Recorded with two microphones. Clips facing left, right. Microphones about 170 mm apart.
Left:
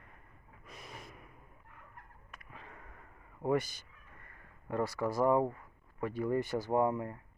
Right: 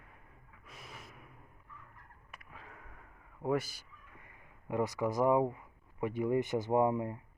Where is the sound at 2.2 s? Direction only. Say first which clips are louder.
Right 1 dB; centre (ahead or behind); by 7.2 s 20° right (ahead or behind).